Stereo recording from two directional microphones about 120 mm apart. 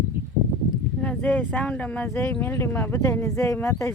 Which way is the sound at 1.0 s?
10° left (ahead or behind).